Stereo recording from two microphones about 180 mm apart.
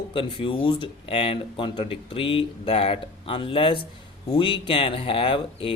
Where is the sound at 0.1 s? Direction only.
30° left (ahead or behind).